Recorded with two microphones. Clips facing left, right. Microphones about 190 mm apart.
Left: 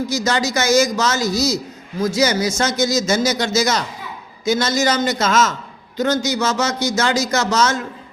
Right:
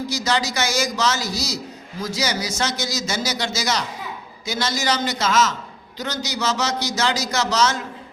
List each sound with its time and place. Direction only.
0.3 s a man's voice: 45° left (ahead or behind)